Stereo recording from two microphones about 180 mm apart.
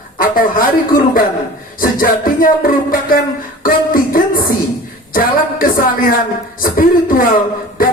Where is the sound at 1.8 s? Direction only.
50° left (ahead or behind).